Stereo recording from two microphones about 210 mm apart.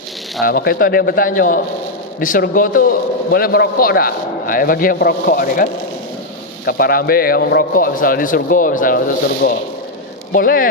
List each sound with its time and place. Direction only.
0.4 s a man's voice: 45° left (ahead or behind)
6.7 s a man's voice: 45° left (ahead or behind)